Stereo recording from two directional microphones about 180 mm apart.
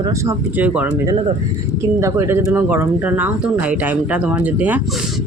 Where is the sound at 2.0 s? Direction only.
15° right (ahead or behind).